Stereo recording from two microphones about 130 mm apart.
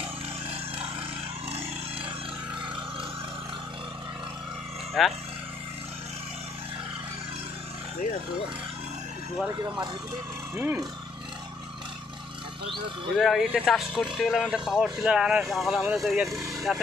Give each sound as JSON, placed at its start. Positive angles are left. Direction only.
{"t": 5.0, "sound": "speech", "side_deg": 0}
{"t": 9.5, "sound": "speech", "side_deg": -30}
{"t": 10.5, "sound": "speech", "side_deg": -10}
{"t": 12.6, "sound": "speech", "side_deg": -40}
{"t": 13.2, "sound": "speech", "side_deg": 0}
{"t": 16.3, "sound": "speech", "side_deg": -25}